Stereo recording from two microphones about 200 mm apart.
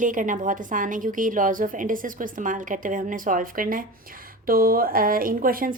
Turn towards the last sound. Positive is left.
turn(degrees=-45)  # may be behind; listen again after turning